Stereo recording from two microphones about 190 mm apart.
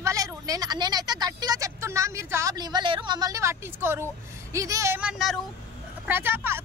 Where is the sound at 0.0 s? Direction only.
20° right (ahead or behind).